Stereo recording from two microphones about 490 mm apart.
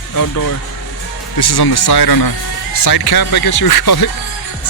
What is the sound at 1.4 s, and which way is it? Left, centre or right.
Speech, left.